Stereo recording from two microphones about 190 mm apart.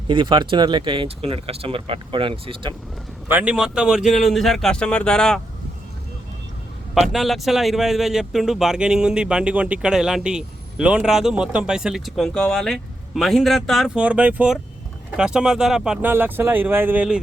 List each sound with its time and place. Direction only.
0.1 s speech: 25° right (ahead or behind)
3.2 s speech: 10° right (ahead or behind)
7.1 s speech: centre (ahead or behind)